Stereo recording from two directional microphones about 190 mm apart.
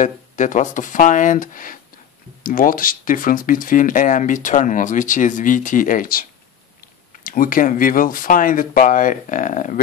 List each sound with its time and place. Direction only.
0.0 s speech: 40° left (ahead or behind)